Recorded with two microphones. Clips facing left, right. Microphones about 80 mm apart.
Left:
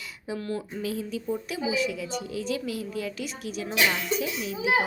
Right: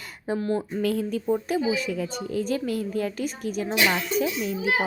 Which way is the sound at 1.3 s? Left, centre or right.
Right.